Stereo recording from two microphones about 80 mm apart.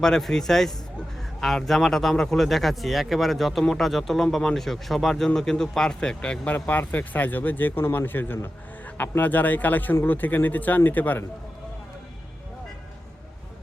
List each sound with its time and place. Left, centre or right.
0.0 s speech: centre; by 11.2 s left